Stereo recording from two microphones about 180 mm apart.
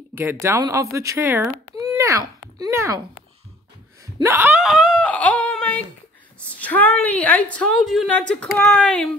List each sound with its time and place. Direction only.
0.1 s speech: 10° right (ahead or behind)
4.2 s a woman's voice: 15° right (ahead or behind); by 9.1 s 5° left (ahead or behind)